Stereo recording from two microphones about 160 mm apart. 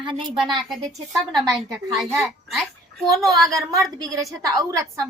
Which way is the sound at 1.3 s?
25° right (ahead or behind).